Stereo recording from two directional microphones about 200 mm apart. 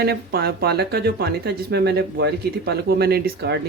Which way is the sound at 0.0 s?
50° right (ahead or behind).